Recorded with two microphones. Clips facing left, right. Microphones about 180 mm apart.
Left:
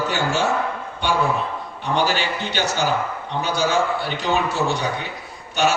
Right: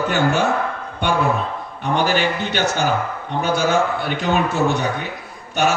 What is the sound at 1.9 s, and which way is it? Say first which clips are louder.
A man's voice: right 3 dB; 55° right (ahead or behind).